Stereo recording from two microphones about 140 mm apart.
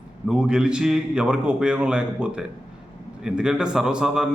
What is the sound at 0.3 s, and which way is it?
A man's voice, 5° right (ahead or behind).